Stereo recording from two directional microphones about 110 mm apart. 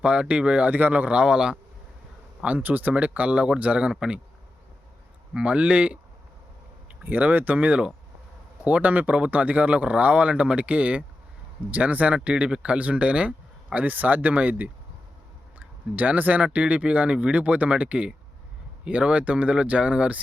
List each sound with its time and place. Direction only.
0.0 s speech: 10° right (ahead or behind)
5.3 s speech: 10° right (ahead or behind)
7.0 s speech: 15° right (ahead or behind)